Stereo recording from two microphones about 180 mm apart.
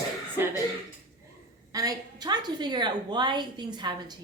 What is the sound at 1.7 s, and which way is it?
A woman's voice, 20° right (ahead or behind).